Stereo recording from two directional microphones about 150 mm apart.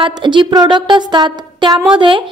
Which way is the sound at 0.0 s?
30° right (ahead or behind).